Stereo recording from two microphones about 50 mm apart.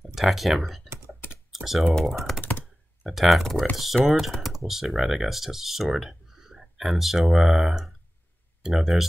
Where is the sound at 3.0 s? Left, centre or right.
Centre.